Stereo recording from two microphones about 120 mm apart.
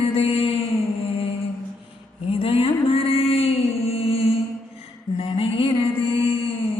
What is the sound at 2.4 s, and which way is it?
Music, 50° left (ahead or behind).